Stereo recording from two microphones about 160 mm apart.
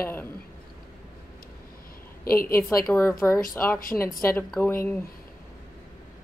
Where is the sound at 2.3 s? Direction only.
15° left (ahead or behind).